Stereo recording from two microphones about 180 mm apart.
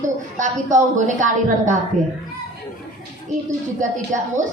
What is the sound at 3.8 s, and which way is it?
Speech, 45° right (ahead or behind).